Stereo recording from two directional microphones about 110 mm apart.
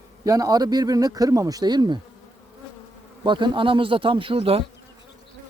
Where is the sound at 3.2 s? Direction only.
45° right (ahead or behind).